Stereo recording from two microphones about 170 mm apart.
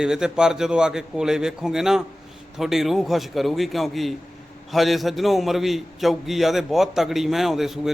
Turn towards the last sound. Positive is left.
turn(degrees=0)  # may be behind; listen again after turning